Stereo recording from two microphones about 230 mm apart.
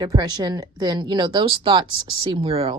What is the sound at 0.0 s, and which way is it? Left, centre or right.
Speech, centre.